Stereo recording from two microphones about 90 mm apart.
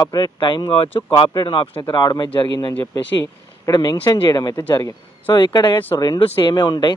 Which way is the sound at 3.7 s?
50° left (ahead or behind).